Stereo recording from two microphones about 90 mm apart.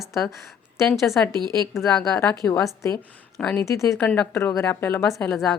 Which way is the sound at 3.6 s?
35° left (ahead or behind).